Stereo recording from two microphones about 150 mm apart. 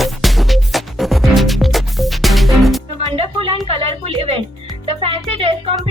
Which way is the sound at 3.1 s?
40° right (ahead or behind).